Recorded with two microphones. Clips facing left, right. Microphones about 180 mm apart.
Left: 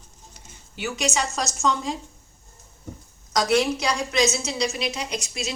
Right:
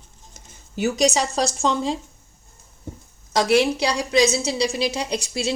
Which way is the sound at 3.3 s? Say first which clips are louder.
Right 3 dB; 30° right (ahead or behind).